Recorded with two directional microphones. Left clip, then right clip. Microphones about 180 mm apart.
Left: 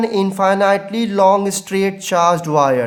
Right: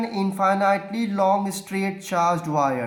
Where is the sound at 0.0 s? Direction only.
40° left (ahead or behind).